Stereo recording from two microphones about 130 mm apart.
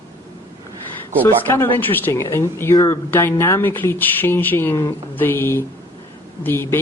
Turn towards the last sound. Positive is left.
turn(degrees=20)  # may be behind; listen again after turning